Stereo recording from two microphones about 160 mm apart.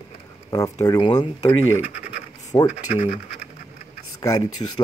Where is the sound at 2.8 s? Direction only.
40° left (ahead or behind).